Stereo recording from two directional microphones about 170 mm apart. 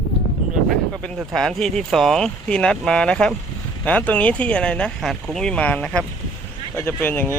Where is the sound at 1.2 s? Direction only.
Centre (ahead or behind).